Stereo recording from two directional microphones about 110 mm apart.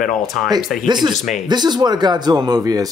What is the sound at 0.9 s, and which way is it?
Speech, 40° right (ahead or behind).